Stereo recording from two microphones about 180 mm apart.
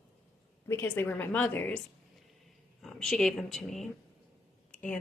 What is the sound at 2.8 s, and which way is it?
Speech, 5° left (ahead or behind).